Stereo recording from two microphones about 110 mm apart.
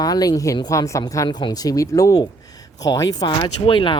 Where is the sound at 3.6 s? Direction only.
50° left (ahead or behind).